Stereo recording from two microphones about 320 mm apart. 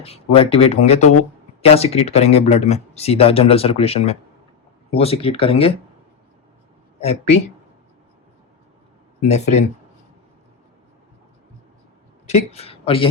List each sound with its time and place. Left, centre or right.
0.0 s speech: centre
7.0 s speech: centre
9.2 s speech: left
12.3 s speech: centre